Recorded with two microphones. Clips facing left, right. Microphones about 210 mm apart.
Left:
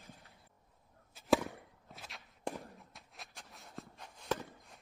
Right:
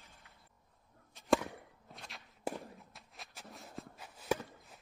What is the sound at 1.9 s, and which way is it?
Walk, centre (ahead or behind).